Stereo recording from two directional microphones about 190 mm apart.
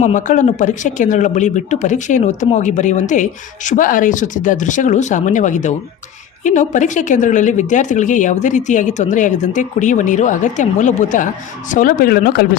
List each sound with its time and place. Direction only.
0.0 s speech: 40° left (ahead or behind)